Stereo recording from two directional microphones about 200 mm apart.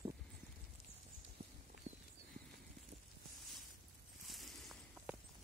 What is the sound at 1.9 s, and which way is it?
Horse, 40° right (ahead or behind).